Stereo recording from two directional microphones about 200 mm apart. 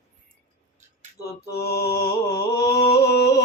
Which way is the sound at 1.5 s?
50° left (ahead or behind).